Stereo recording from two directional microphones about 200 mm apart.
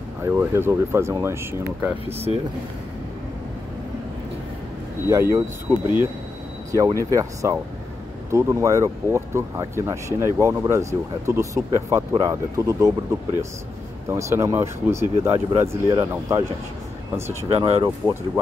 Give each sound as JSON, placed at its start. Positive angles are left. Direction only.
{"t": 0.2, "sound": "speech", "side_deg": -10}
{"t": 2.0, "sound": "speech", "side_deg": -30}
{"t": 5.3, "sound": "speech", "side_deg": -10}
{"t": 14.1, "sound": "speech", "side_deg": -15}
{"t": 17.5, "sound": "speech", "side_deg": -30}
{"t": 17.8, "sound": "speech", "side_deg": -15}